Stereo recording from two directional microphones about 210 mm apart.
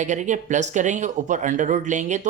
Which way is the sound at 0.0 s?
35° right (ahead or behind).